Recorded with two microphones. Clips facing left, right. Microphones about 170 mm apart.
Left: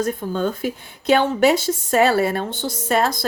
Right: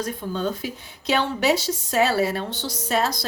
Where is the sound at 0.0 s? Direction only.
50° left (ahead or behind).